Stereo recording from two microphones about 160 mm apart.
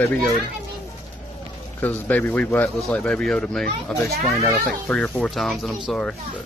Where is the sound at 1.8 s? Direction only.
10° left (ahead or behind).